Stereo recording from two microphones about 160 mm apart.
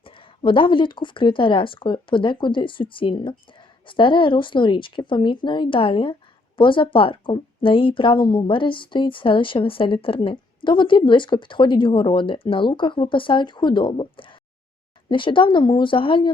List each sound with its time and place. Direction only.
0.0 s speech: 35° left (ahead or behind)